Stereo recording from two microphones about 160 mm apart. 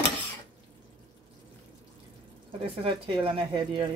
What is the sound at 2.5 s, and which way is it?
Speech, 35° right (ahead or behind).